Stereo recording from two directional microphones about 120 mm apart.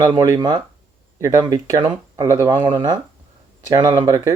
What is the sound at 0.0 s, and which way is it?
Speech, 30° right (ahead or behind).